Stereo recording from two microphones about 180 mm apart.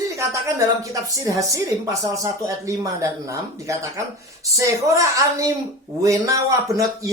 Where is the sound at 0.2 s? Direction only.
15° right (ahead or behind).